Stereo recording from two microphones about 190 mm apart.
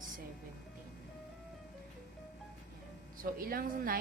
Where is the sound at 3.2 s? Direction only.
50° right (ahead or behind).